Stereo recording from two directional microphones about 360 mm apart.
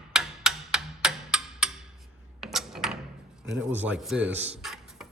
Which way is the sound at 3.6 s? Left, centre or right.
Centre.